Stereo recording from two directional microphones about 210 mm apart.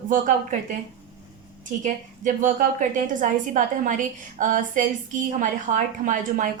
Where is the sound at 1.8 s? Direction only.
35° right (ahead or behind).